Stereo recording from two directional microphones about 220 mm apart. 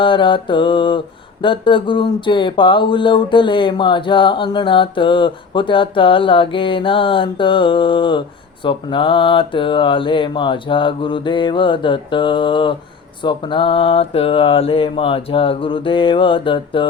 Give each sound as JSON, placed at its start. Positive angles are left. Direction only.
{"t": 0.0, "sound": "mantra", "side_deg": 20}